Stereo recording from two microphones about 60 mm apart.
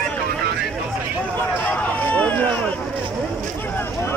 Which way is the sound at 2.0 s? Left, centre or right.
Left.